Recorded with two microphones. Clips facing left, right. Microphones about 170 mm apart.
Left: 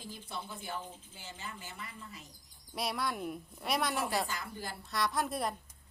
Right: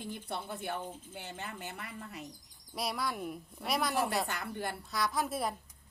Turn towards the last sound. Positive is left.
turn(degrees=0)  # may be behind; listen again after turning